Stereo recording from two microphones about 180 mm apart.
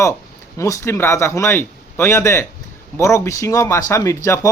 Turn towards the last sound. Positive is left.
turn(degrees=15)  # may be behind; listen again after turning